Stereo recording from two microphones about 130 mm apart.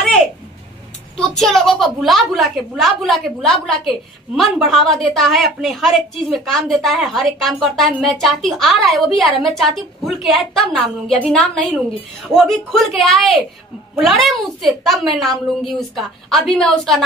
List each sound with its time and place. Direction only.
1.4 s a woman's voice: centre (ahead or behind)